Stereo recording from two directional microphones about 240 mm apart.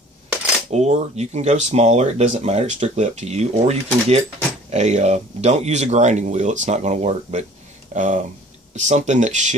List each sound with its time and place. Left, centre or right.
0.7 s speech: right